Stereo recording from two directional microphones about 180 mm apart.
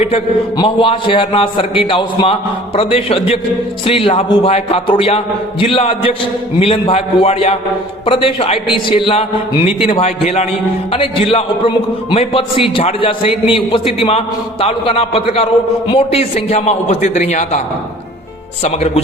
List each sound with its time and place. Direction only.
0.0 s a man's voice: 30° left (ahead or behind)
18.6 s a man's voice: 35° left (ahead or behind)